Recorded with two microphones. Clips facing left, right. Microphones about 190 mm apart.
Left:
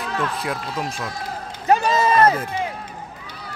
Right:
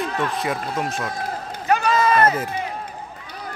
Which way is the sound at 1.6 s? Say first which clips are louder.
Left 2 dB; 25° left (ahead or behind).